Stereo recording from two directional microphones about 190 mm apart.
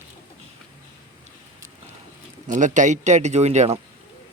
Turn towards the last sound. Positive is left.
turn(degrees=-35)  # may be behind; listen again after turning